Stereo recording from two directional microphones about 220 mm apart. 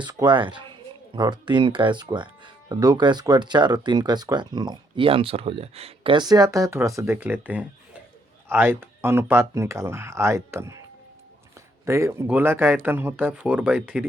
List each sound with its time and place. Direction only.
0.0 s speech: 20° right (ahead or behind)
11.9 s speech: 10° right (ahead or behind)